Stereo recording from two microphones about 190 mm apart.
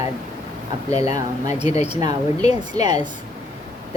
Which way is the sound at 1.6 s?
35° left (ahead or behind).